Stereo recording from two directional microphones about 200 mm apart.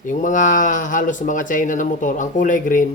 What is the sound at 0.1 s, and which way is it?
Speech, 40° left (ahead or behind).